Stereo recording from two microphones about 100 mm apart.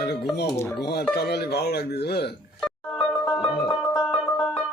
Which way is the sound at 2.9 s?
5° left (ahead or behind).